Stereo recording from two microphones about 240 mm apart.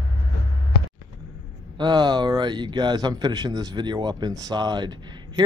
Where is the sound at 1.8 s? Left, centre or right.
Centre.